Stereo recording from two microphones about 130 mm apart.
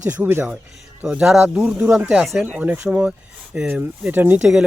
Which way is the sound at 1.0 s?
5° right (ahead or behind).